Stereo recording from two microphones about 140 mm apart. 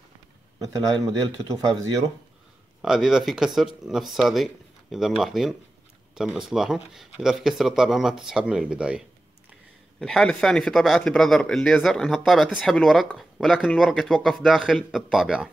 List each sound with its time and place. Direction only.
1.0 s speech: 25° right (ahead or behind)
2.8 s speech: 5° right (ahead or behind)